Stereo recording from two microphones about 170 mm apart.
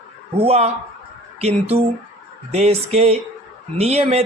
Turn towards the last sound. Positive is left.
turn(degrees=-40)  # may be behind; listen again after turning